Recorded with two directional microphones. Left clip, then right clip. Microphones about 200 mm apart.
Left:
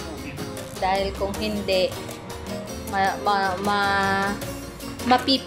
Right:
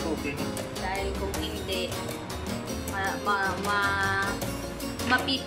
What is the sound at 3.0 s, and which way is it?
A woman's voice, 25° left (ahead or behind).